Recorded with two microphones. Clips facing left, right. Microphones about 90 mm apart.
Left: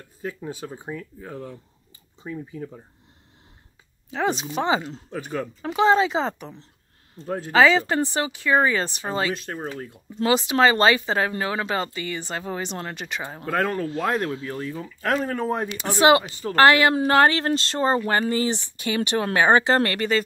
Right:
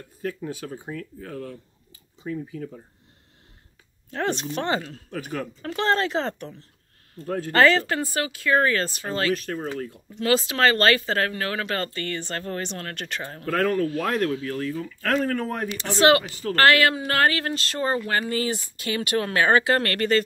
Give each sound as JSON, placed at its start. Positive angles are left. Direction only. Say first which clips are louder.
{"t": 0.2, "sound": "speech", "louder": "right 1 dB", "side_deg": 25}
{"t": 4.1, "sound": "speech", "louder": "left 2 dB", "side_deg": 10}
{"t": 5.6, "sound": "speech", "louder": "left 5 dB", "side_deg": 10}
{"t": 7.5, "sound": "speech", "louder": "left 1 dB", "side_deg": 5}
{"t": 7.9, "sound": "speech", "louder": "left 3 dB", "side_deg": 20}
{"t": 10.2, "sound": "speech", "louder": "left 2 dB", "side_deg": 20}
{"t": 13.4, "sound": "speech", "louder": "right 2 dB", "side_deg": 30}
{"t": 14.7, "sound": "speech", "louder": "left 2 dB", "side_deg": 15}